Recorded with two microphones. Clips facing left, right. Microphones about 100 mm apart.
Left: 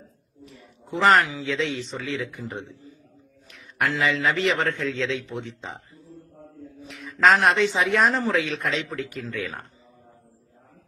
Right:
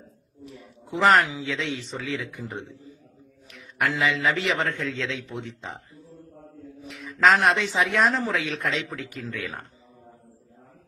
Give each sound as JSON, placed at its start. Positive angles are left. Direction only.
{"t": 0.9, "sound": "a man's voice", "side_deg": -5}
{"t": 1.2, "sound": "speech", "side_deg": -20}
{"t": 1.5, "sound": "speech", "side_deg": 0}
{"t": 3.8, "sound": "speech", "side_deg": 0}
{"t": 6.8, "sound": "speech", "side_deg": 0}